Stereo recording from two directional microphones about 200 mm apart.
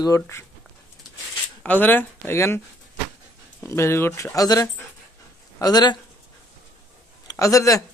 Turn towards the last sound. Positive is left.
turn(degrees=15)  # may be behind; listen again after turning